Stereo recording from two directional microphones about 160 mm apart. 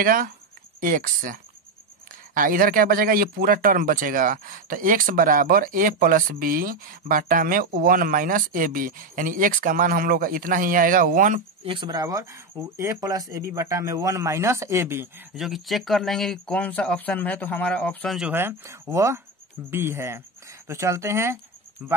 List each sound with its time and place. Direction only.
0.0 s speech: 60° right (ahead or behind)
11.6 s speech: 30° right (ahead or behind); by 15.2 s 15° right (ahead or behind)
15.3 s speech: centre (ahead or behind)
18.3 s speech: 15° right (ahead or behind)